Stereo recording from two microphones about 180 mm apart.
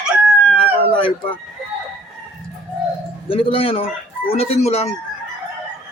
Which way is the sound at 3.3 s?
30° left (ahead or behind).